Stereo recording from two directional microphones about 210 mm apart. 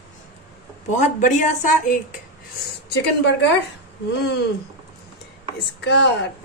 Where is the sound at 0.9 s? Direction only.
35° left (ahead or behind).